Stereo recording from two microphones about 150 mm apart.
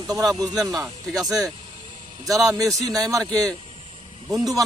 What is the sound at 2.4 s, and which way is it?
A man's voice, 20° right (ahead or behind).